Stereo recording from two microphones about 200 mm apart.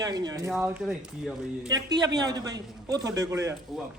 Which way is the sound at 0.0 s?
20° right (ahead or behind).